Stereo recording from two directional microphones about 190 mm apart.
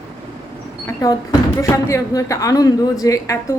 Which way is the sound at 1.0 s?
15° left (ahead or behind).